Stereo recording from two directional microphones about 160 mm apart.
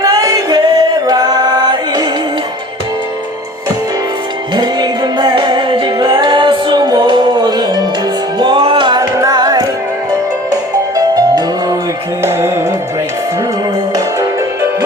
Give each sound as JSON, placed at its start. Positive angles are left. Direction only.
{"t": 0.0, "sound": "music", "side_deg": -20}
{"t": 4.5, "sound": "music", "side_deg": -25}
{"t": 13.9, "sound": "music", "side_deg": -20}